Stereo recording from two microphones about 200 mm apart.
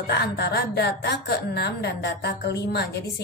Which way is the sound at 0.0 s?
55° left (ahead or behind).